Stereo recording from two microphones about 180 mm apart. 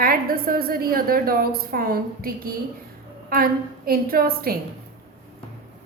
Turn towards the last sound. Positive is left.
turn(degrees=-55)  # may be behind; listen again after turning